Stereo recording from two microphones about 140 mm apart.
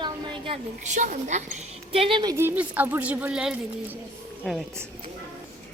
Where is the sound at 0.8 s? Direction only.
60° right (ahead or behind).